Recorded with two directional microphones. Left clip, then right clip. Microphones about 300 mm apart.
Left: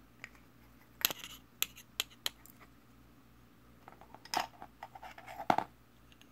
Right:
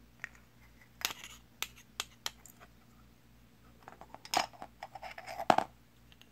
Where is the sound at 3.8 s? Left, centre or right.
Centre.